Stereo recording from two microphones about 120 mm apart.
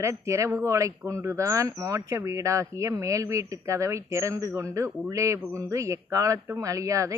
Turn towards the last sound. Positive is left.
turn(degrees=-25)  # may be behind; listen again after turning